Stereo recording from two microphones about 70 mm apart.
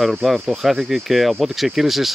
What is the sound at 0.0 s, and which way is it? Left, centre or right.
Speech, centre.